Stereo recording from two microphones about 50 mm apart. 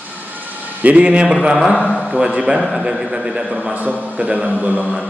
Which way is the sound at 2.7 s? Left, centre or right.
Centre.